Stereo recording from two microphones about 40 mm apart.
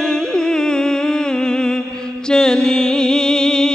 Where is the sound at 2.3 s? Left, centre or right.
Centre.